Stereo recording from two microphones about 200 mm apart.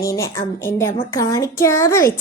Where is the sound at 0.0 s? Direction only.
15° left (ahead or behind).